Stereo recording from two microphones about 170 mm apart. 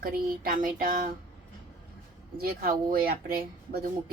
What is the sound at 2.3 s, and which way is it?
Speech, 60° right (ahead or behind).